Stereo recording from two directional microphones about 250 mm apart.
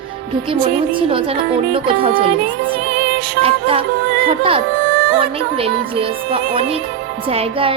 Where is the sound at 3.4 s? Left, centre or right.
Right.